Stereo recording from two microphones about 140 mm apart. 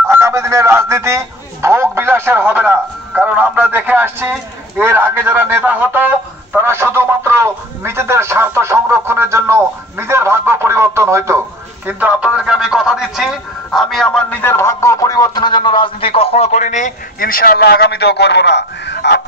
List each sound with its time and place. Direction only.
0.0 s a man's voice: 20° right (ahead or behind)
11.9 s a man's voice: 10° right (ahead or behind); by 17.6 s 90° left